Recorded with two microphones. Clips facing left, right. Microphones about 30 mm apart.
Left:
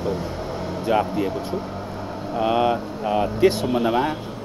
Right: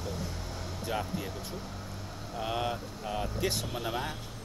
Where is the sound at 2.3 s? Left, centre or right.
Left.